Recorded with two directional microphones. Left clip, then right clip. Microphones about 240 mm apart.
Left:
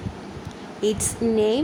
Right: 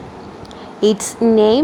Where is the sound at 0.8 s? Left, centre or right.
Centre.